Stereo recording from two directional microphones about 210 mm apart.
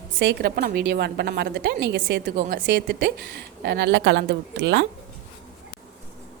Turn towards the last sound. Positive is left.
turn(degrees=-55)  # may be behind; listen again after turning